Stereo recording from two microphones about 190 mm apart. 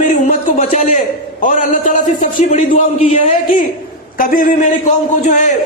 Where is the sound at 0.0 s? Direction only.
40° left (ahead or behind).